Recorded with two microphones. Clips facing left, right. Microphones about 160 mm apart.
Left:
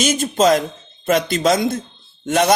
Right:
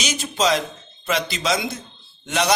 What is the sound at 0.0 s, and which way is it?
A man's voice, 50° left (ahead or behind).